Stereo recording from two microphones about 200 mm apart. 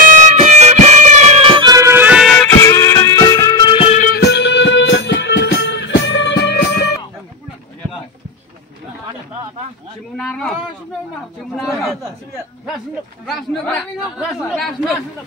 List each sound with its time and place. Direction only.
0.0 s music: 40° right (ahead or behind); by 2.7 s 5° left (ahead or behind)
2.7 s music: 15° left (ahead or behind); by 4.1 s 35° left (ahead or behind)
4.1 s music: 55° left (ahead or behind)
10.1 s a sound: 5° left (ahead or behind)
11.6 s chatter: centre (ahead or behind)
13.2 s a man's voice: 5° left (ahead or behind)